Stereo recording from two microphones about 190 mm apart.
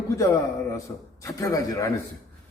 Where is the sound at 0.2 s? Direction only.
15° left (ahead or behind).